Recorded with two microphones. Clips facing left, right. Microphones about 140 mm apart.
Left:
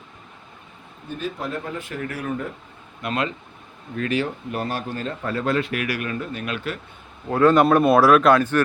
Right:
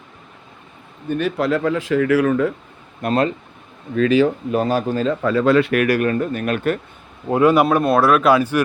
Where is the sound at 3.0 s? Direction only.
40° right (ahead or behind).